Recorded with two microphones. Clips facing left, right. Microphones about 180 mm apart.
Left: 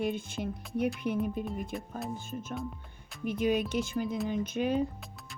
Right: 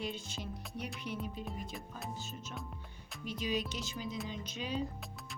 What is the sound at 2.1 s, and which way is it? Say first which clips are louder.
Speech: left 7 dB; 55° left (ahead or behind).